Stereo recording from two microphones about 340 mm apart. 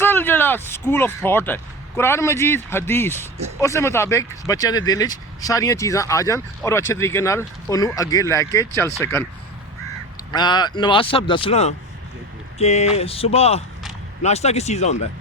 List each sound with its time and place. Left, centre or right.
0.0 s speech: centre
10.3 s speech: centre